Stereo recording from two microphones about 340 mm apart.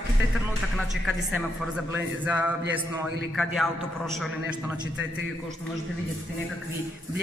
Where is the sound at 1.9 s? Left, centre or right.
Centre.